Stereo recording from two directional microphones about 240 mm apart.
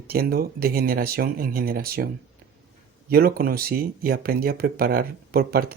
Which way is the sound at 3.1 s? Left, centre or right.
Right.